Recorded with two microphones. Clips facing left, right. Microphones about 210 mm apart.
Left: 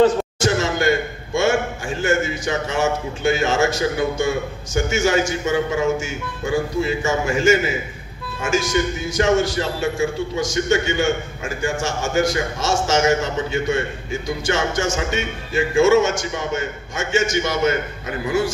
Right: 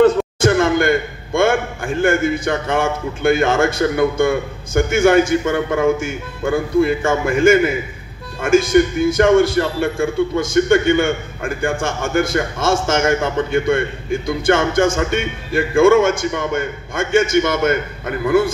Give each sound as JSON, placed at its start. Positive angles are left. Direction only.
{"t": 0.0, "sound": "a man's voice", "side_deg": -55}